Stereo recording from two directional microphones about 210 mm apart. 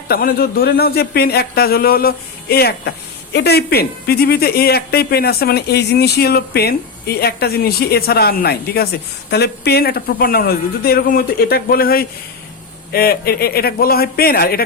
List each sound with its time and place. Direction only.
0.1 s speech: 45° left (ahead or behind)